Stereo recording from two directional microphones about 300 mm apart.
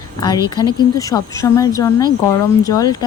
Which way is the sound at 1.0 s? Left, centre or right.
Centre.